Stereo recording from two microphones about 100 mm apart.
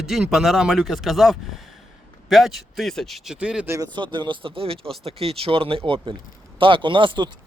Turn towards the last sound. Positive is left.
turn(degrees=-55)  # may be behind; listen again after turning